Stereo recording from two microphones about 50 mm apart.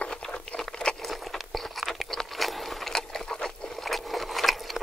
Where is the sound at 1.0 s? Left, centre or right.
Centre.